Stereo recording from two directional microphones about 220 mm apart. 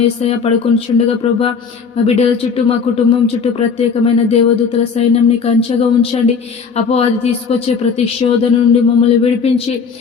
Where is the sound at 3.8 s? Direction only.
30° left (ahead or behind).